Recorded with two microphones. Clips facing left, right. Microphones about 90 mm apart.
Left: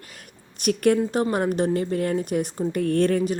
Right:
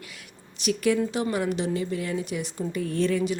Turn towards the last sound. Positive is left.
turn(degrees=50)  # may be behind; listen again after turning